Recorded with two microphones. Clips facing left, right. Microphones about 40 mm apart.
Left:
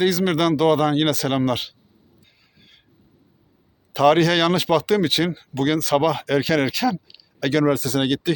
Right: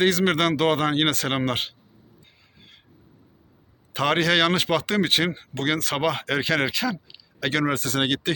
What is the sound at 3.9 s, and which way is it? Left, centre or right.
Speech, right.